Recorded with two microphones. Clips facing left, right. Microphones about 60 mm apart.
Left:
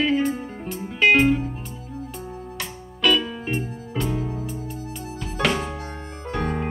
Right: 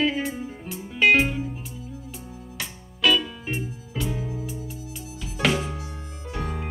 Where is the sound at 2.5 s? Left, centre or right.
Centre.